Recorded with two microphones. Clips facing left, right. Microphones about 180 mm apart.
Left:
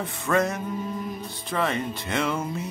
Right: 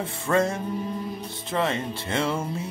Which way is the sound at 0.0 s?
30° right (ahead or behind).